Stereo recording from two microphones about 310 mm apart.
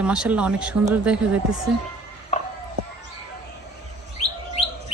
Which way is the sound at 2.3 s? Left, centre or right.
Left.